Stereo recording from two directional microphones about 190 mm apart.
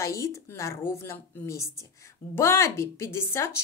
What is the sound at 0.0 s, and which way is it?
Speech, 15° left (ahead or behind).